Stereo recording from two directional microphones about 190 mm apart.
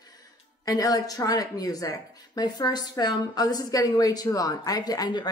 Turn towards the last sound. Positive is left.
turn(degrees=20)  # may be behind; listen again after turning